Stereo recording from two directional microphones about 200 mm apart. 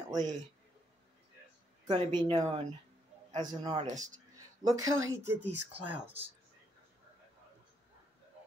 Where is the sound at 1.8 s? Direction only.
25° right (ahead or behind).